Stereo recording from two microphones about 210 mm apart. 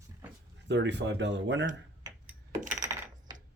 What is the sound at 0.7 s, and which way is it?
Speech, 55° right (ahead or behind).